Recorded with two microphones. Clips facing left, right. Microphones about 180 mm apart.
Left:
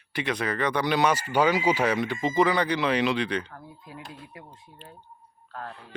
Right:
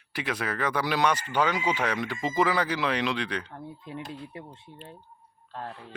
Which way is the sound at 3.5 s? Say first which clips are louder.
Right 5 dB; 25° right (ahead or behind).